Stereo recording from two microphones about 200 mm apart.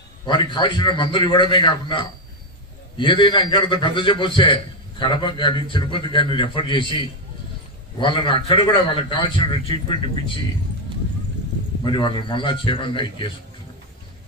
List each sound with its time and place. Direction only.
0.3 s a man's voice: 25° left (ahead or behind)
11.8 s a man's voice: 25° left (ahead or behind)